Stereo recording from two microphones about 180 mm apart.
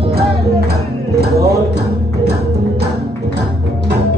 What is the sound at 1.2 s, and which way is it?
Music, 65° right (ahead or behind).